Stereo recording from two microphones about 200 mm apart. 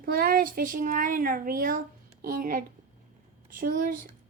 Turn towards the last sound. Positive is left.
turn(degrees=-45)  # may be behind; listen again after turning